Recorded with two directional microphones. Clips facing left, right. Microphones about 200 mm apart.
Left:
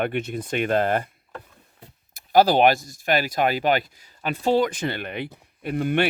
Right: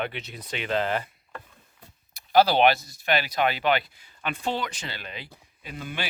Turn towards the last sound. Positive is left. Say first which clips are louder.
# left 12 dB
turn(degrees=60)  # may be behind; listen again after turning